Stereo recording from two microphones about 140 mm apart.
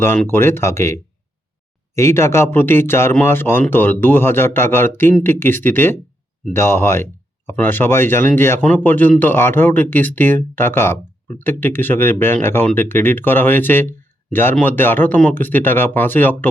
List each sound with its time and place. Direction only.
0.0 s speech: 15° left (ahead or behind)
2.0 s speech: 20° left (ahead or behind)